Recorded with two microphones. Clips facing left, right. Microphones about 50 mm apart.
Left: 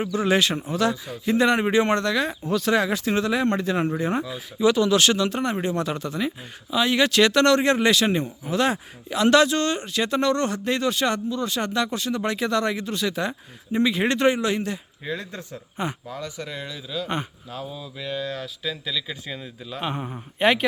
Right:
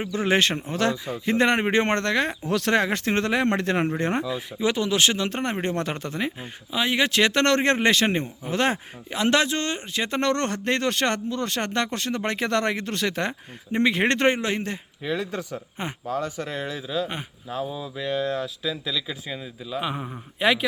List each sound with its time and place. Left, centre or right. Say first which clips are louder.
0.1 s a man's voice: right 1 dB; right
2.5 s speech: left 3 dB; right
2.7 s speech: right 1 dB; right
4.6 s speech: left 4 dB; right
5.3 s a man's voice: left 1 dB; right
6.7 s speech: left 2 dB; right
7.4 s a man's voice: left 2 dB; right
10.2 s speech: left 1 dB; right
15.2 s speech: right 6 dB; right
15.8 s a man's voice: right 1 dB; right
17.7 s speech: right 4 dB; centre
19.3 s speech: right 2 dB; centre